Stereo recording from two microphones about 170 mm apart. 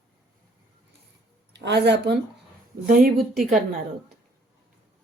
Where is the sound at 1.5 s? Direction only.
85° right.